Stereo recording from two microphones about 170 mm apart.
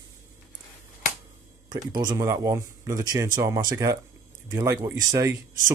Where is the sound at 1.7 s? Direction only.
25° right (ahead or behind).